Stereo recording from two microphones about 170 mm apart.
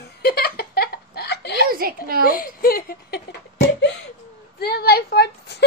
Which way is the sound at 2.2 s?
60° left (ahead or behind).